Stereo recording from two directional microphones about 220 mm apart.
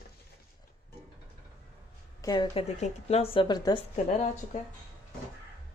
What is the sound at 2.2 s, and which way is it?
Speech, 20° left (ahead or behind).